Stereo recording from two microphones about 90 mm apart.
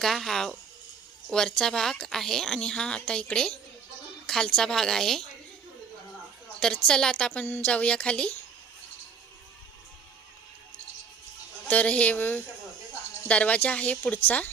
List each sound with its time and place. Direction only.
0.0 s a woman's voice: 5° left (ahead or behind)
6.6 s a woman's voice: 10° left (ahead or behind)
11.7 s a woman's voice: 15° left (ahead or behind)